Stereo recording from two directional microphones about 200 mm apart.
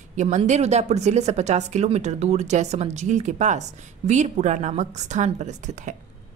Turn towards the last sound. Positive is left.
turn(degrees=-35)  # may be behind; listen again after turning